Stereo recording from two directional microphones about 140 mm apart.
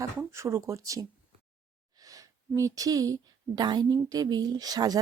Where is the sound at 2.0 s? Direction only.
25° right (ahead or behind).